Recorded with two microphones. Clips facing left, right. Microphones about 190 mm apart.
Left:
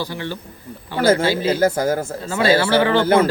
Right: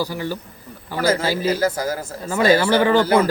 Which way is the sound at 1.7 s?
25° left (ahead or behind).